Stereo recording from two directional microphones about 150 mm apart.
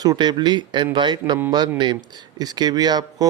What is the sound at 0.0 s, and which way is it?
Speech, 25° right (ahead or behind).